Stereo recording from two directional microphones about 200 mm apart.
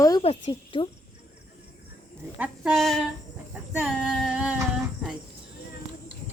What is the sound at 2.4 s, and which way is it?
Speech, centre (ahead or behind).